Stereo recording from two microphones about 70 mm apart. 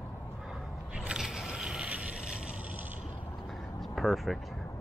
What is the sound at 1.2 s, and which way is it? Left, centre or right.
Vehicle, centre.